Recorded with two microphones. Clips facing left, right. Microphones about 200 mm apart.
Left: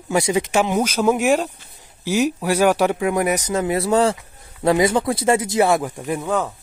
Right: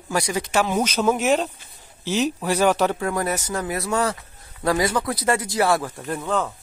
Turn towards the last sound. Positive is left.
turn(degrees=10)  # may be behind; listen again after turning